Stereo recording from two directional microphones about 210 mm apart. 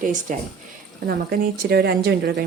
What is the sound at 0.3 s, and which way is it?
Speech, 40° right (ahead or behind).